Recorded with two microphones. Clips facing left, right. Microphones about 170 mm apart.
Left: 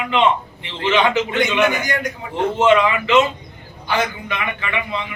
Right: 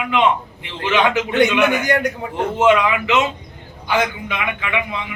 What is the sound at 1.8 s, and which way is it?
Speech, 60° right (ahead or behind).